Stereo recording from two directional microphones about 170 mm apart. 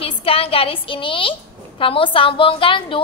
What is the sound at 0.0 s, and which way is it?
A woman's voice, 35° left (ahead or behind).